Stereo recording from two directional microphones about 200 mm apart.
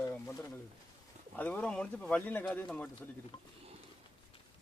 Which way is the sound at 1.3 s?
10° left (ahead or behind).